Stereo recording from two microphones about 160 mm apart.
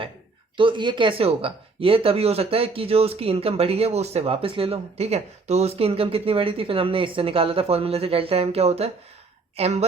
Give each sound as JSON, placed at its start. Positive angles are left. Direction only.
{"t": 0.5, "sound": "speech", "side_deg": -30}